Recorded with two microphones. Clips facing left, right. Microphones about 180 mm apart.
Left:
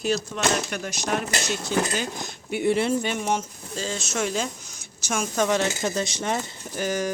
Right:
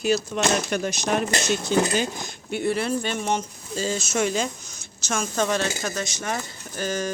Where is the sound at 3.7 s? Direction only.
5° right (ahead or behind).